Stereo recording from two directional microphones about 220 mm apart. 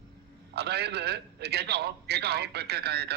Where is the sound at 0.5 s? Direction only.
45° right (ahead or behind).